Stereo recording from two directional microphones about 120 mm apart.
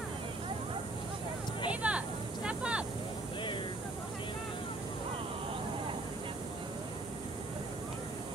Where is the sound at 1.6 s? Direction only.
10° right (ahead or behind).